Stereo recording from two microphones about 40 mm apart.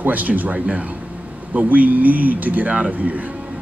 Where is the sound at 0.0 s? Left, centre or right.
Right.